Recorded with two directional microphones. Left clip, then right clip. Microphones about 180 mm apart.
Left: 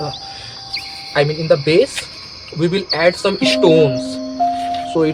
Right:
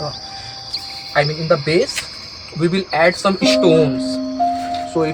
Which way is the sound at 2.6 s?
65° left (ahead or behind).